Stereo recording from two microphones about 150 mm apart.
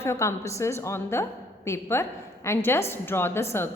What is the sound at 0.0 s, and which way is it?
A woman's voice, 20° left (ahead or behind).